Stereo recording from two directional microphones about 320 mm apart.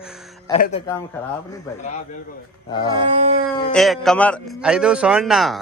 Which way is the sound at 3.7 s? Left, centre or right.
Centre.